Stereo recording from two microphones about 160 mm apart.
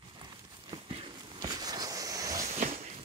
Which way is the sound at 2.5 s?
40° right (ahead or behind).